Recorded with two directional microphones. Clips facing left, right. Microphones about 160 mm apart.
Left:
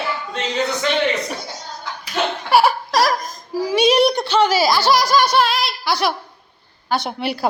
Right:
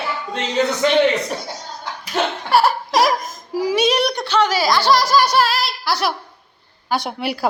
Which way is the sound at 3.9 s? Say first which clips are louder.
Left 3 dB; 25° left (ahead or behind).